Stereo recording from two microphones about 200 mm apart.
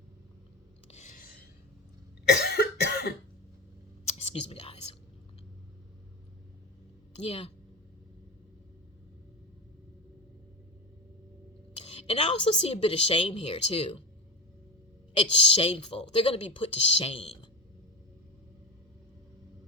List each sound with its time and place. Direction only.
0.9 s a sound: 35° left (ahead or behind)
2.3 s cough: 55° left (ahead or behind)
4.2 s whispering: 30° left (ahead or behind)
7.2 s a woman's voice: 30° left (ahead or behind)
12.0 s a woman's voice: 30° left (ahead or behind)
15.1 s a woman's voice: 30° left (ahead or behind)